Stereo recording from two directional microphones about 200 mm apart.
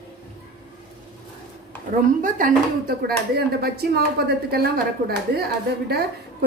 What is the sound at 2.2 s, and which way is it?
A woman's voice, 40° right (ahead or behind).